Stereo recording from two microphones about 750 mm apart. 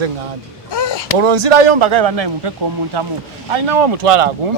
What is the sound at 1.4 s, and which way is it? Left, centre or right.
Speech, right.